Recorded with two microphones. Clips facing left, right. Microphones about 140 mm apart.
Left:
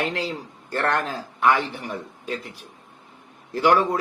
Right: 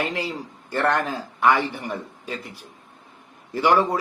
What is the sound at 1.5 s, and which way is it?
Speech, 65° right (ahead or behind).